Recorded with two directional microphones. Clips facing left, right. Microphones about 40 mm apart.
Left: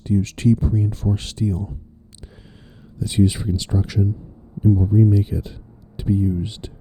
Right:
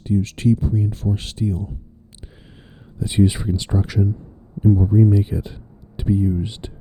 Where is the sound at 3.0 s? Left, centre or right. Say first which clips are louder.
Right 1 dB; centre.